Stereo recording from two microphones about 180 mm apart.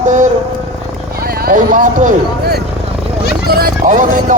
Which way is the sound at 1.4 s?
50° right (ahead or behind).